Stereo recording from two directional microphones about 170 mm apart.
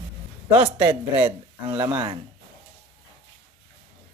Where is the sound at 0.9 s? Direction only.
15° right (ahead or behind).